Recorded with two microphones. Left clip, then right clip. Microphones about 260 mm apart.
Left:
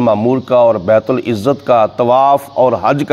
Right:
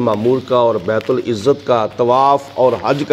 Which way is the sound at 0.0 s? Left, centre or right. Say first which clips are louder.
Left 3 dB; left.